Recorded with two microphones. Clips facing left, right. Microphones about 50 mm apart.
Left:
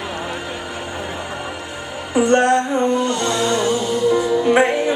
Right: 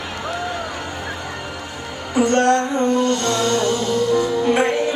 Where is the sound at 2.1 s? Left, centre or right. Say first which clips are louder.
Left 1 dB; centre.